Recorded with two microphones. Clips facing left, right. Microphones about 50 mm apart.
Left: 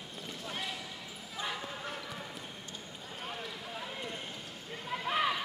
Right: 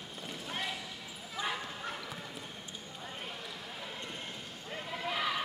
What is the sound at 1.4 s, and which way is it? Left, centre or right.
Bow-wow, centre.